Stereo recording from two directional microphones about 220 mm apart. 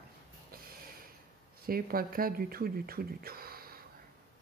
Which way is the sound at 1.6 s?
40° right (ahead or behind).